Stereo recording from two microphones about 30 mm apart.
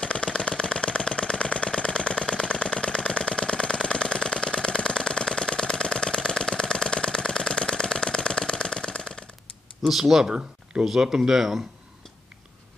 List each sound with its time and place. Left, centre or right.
0.0 s a sound: left
9.8 s speech: centre
10.2 s speech: right
10.9 s speech: centre